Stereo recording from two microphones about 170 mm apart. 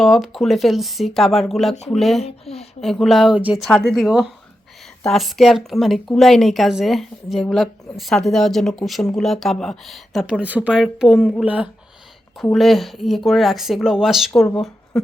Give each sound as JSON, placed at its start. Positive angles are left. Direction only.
{"t": 0.0, "sound": "a woman's voice", "side_deg": 0}
{"t": 2.2, "sound": "a woman's voice", "side_deg": 35}
{"t": 2.8, "sound": "a woman's voice", "side_deg": 0}